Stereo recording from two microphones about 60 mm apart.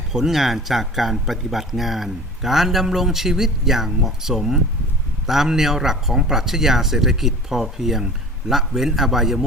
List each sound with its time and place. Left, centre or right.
0.1 s speech: centre